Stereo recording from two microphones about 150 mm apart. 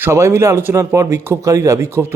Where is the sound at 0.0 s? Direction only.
20° right (ahead or behind).